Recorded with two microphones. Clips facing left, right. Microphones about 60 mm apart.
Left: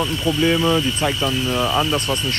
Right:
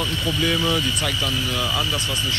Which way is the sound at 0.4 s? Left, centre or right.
Left.